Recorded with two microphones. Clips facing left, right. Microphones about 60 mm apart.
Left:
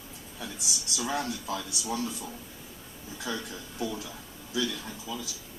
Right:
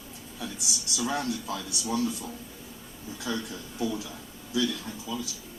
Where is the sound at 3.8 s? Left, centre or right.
Centre.